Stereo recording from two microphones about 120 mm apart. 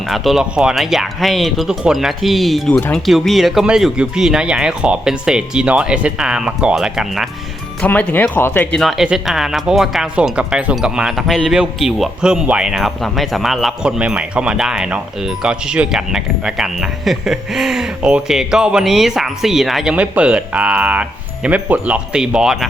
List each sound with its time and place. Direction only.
0.0 s speech: centre (ahead or behind)
7.8 s speech: 15° left (ahead or behind)
8.7 s speech: centre (ahead or behind)